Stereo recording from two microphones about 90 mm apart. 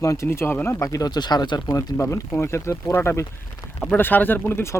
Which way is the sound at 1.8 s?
35° left (ahead or behind).